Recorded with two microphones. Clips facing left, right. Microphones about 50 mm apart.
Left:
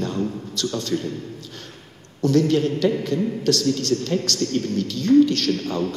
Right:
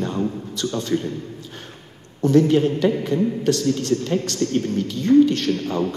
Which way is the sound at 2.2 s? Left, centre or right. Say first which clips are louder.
Right 2 dB; right.